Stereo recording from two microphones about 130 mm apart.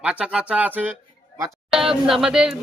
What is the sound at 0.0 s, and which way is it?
Speech, 10° right (ahead or behind).